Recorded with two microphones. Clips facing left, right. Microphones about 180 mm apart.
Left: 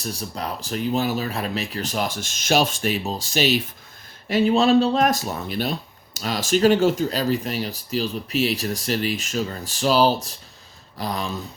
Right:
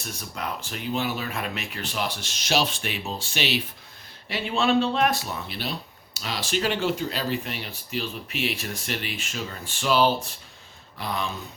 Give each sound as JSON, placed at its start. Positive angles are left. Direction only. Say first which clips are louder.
{"t": 0.0, "sound": "speech", "louder": "left 4 dB", "side_deg": 35}